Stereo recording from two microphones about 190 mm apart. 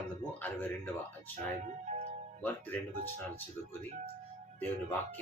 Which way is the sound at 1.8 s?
35° right (ahead or behind).